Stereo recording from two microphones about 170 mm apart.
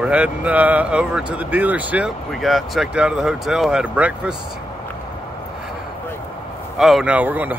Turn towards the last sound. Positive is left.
turn(degrees=-10)  # may be behind; listen again after turning